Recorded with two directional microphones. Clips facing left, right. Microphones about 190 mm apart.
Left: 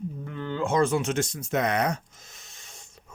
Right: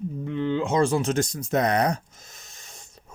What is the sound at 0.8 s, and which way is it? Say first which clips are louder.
Speech: right 2 dB; 35° right (ahead or behind).